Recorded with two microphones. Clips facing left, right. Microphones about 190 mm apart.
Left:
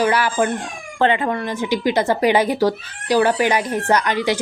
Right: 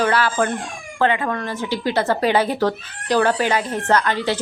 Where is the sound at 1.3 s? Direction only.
15° left (ahead or behind).